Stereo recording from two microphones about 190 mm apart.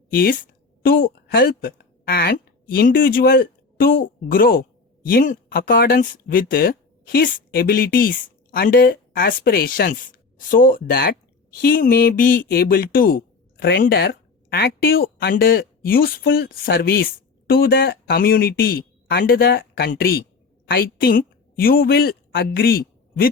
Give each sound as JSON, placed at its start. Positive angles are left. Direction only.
{"t": 0.1, "sound": "a woman's voice", "side_deg": 50}